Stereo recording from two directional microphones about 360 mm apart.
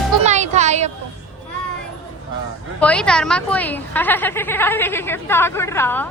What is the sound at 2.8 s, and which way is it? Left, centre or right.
Speech, centre.